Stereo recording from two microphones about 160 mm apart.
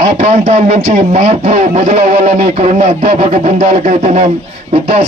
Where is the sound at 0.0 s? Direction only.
35° right (ahead or behind).